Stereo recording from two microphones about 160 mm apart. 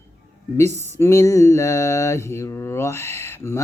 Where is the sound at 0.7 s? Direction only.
45° right (ahead or behind).